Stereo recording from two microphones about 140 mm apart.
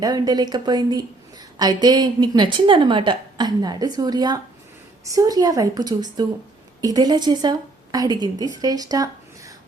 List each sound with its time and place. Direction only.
0.0 s a woman's voice: 30° right (ahead or behind)